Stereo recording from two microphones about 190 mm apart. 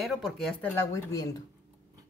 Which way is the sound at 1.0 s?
15° left (ahead or behind).